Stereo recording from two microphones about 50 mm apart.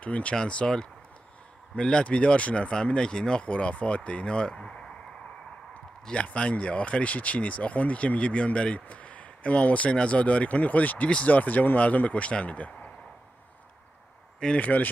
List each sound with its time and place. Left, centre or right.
0.0 s speech: left; by 4.9 s centre
6.2 s speech: left
14.6 s speech: left